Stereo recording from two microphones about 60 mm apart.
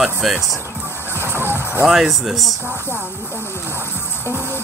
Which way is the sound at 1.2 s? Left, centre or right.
Right.